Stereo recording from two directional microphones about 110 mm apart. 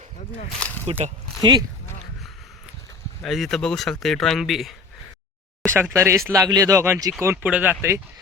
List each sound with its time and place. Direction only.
0.9 s speech: 65° right (ahead or behind)
1.4 s speech: 40° right (ahead or behind)
3.2 s speech: centre (ahead or behind)
5.7 s speech: 25° right (ahead or behind)